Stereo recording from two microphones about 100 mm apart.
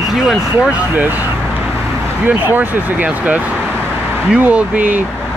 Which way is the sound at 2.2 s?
20° right (ahead or behind).